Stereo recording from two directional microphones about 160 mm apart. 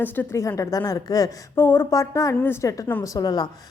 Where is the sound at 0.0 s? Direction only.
15° left (ahead or behind).